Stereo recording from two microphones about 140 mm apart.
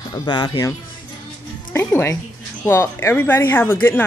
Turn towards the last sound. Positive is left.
turn(degrees=15)  # may be behind; listen again after turning